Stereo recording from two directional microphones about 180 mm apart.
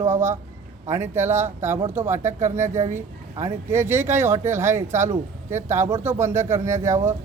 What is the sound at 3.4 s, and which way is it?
Speech, 15° right (ahead or behind).